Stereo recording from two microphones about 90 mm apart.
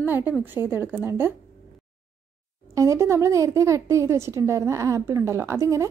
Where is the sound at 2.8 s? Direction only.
35° right (ahead or behind).